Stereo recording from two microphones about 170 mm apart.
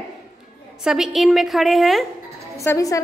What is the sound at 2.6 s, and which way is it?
Speech, 20° left (ahead or behind).